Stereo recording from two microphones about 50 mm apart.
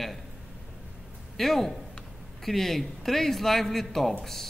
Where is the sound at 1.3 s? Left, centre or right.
Centre.